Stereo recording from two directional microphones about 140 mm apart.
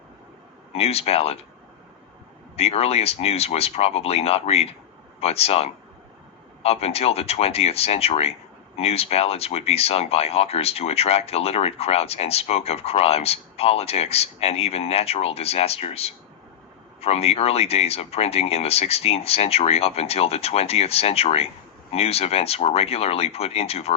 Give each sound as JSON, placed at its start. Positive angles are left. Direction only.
{"t": 0.7, "sound": "speech", "side_deg": 45}
{"t": 2.6, "sound": "speech", "side_deg": 45}